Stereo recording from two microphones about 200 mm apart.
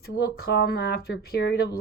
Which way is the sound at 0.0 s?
50° left (ahead or behind).